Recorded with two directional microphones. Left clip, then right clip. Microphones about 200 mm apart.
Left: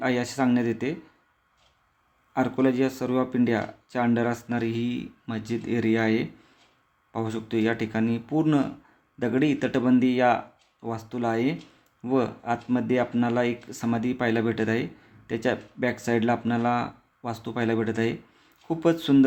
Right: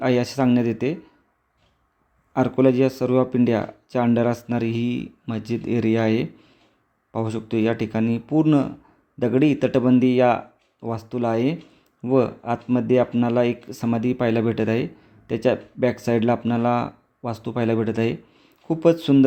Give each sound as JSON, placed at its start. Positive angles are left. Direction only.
{"t": 0.0, "sound": "speech", "side_deg": -25}
{"t": 2.3, "sound": "speech", "side_deg": -25}